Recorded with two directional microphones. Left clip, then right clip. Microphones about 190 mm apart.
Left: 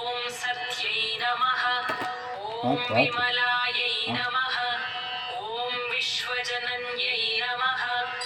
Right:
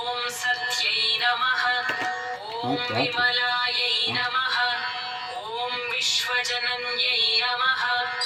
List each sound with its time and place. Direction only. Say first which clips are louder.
2.6 s speech: left 2 dB; 30° left (ahead or behind)